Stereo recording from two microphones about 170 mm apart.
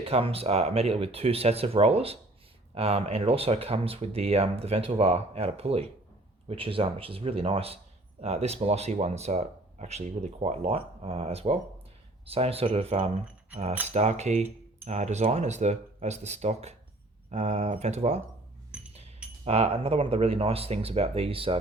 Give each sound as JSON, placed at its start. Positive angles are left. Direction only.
{"t": 0.0, "sound": "speech", "side_deg": -35}
{"t": 18.7, "sound": "a sound", "side_deg": -5}
{"t": 19.5, "sound": "speech", "side_deg": -35}